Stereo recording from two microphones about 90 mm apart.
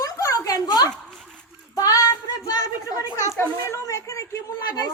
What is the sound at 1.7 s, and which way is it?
Child singing, 40° left (ahead or behind).